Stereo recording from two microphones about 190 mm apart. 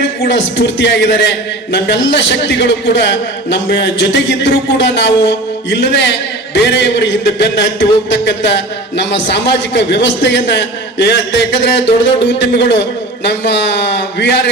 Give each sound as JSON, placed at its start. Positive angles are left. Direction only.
{"t": 0.0, "sound": "a man's voice", "side_deg": 75}